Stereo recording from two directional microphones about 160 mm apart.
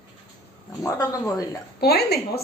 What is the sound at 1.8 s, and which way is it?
Speech, 85° left.